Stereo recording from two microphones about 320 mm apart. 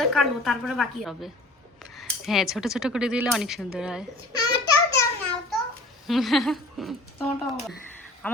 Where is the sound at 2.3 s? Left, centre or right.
Centre.